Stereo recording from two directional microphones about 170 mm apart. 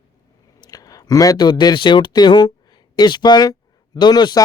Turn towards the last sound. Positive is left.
turn(degrees=25)  # may be behind; listen again after turning